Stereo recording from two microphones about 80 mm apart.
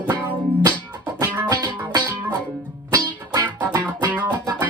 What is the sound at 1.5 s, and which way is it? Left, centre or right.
Music, right.